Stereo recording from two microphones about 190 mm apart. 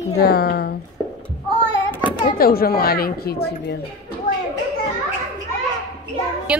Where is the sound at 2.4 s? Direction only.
50° left (ahead or behind).